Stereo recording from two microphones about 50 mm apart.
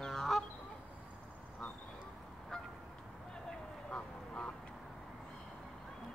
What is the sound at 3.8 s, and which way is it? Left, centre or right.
Duck, left.